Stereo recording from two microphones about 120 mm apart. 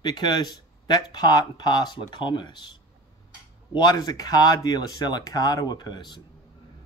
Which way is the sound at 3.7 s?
35° left (ahead or behind).